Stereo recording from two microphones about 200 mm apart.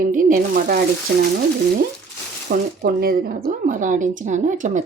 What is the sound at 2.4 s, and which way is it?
Speech, 50° right (ahead or behind).